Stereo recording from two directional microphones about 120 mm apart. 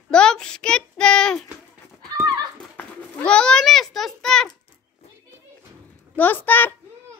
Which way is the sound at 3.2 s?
5° left (ahead or behind).